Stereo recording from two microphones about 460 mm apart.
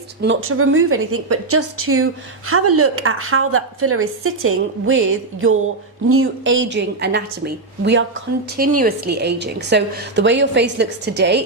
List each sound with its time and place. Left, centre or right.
0.2 s a woman's voice: right